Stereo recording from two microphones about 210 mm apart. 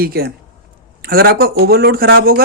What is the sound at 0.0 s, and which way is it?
Speech, 45° right (ahead or behind).